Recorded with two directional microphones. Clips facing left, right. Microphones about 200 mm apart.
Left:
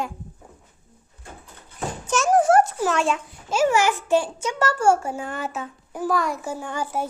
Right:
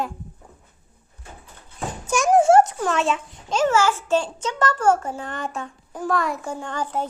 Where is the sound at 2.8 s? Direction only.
Centre (ahead or behind).